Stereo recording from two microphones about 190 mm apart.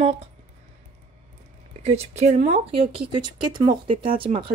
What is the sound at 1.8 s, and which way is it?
Speech, 35° right (ahead or behind).